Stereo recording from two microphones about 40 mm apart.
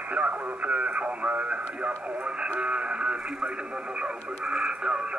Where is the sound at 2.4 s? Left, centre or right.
Right.